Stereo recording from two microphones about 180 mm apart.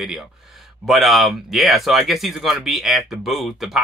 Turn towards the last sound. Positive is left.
turn(degrees=0)  # may be behind; listen again after turning